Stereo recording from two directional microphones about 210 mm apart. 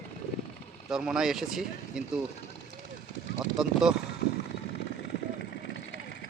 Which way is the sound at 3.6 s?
Centre (ahead or behind).